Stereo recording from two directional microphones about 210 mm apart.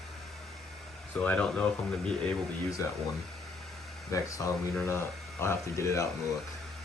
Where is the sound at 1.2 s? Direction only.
5° left (ahead or behind).